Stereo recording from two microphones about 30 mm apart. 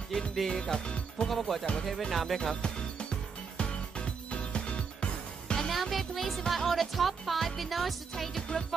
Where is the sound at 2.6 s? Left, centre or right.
Left.